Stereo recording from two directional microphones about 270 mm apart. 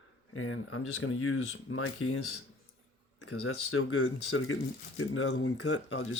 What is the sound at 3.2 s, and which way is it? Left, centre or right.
Speech, left.